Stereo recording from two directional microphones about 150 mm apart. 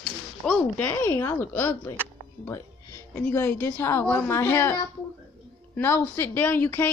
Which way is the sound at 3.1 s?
15° left (ahead or behind).